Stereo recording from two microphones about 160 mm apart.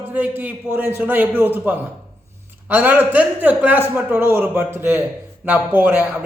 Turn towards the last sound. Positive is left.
turn(degrees=-10)  # may be behind; listen again after turning